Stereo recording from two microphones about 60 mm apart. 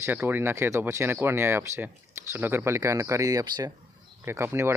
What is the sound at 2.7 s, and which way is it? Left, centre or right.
Speech, right.